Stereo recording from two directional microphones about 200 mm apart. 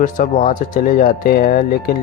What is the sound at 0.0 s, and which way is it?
Speech, 40° left (ahead or behind).